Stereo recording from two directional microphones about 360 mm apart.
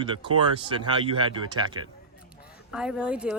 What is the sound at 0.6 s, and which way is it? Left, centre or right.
Speech, centre.